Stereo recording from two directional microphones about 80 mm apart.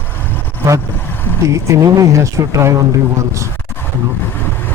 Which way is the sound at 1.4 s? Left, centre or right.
Right.